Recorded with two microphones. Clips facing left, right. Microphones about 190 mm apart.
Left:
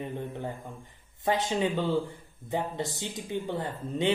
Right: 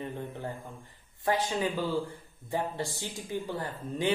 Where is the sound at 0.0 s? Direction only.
15° left (ahead or behind).